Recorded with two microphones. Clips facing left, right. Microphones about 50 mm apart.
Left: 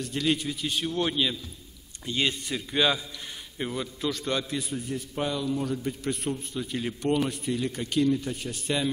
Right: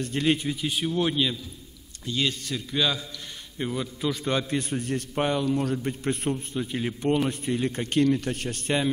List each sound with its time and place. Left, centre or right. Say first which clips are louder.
0.0 s a man's voice: right 3 dB; right; by 1.3 s centre
2.0 s a man's voice: even; left
3.5 s a man's voice: right 2 dB; centre
4.1 s a man's voice: right 3 dB; centre
4.6 s a man's voice: right 4 dB; right
5.1 s a man's voice: right 4 dB; right
5.9 s a man's voice: right 3 dB; right
6.3 s a man's voice: right 2 dB; centre
7.2 s a man's voice: right 3 dB; right
8.2 s a man's voice: right 3 dB; right
8.6 s a man's voice: right 2 dB; right